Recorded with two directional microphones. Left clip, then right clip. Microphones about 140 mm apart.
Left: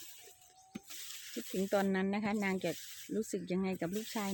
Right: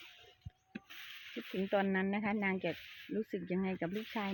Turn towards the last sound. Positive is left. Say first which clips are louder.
# even
turn(degrees=20)  # may be behind; listen again after turning